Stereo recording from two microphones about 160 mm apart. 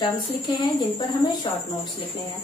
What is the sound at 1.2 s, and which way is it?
Speech, 25° left (ahead or behind).